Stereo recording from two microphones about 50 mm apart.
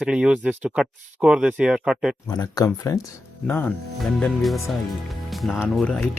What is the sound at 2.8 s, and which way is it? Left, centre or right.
Speech, left.